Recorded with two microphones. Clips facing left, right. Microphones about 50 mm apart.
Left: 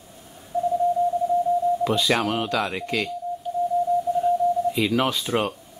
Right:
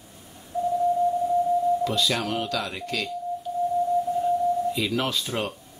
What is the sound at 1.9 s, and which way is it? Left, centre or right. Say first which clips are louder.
Speech: left 4 dB; left.